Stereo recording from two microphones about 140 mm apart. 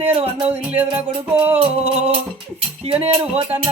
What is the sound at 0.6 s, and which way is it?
Music, 10° right (ahead or behind).